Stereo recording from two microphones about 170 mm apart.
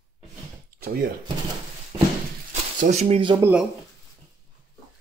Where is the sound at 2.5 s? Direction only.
45° right (ahead or behind).